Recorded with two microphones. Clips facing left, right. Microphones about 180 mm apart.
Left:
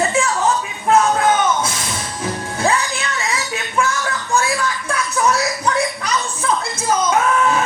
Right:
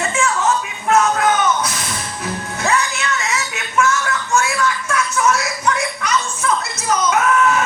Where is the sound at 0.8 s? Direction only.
30° left (ahead or behind).